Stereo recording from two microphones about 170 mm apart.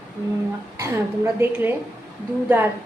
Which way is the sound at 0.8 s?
15° right (ahead or behind).